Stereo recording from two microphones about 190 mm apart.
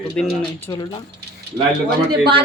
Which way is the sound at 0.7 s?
20° left (ahead or behind).